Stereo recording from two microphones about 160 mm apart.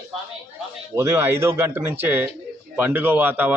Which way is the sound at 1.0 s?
15° right (ahead or behind).